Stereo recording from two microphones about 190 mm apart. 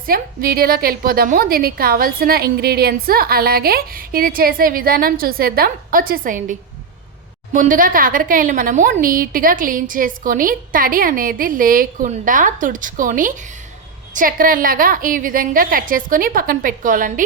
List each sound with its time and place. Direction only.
0.0 s a woman's voice: 50° right (ahead or behind)